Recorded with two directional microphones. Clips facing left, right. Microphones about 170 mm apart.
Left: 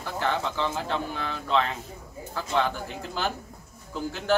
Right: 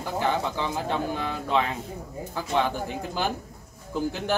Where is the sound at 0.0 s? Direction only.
15° right (ahead or behind).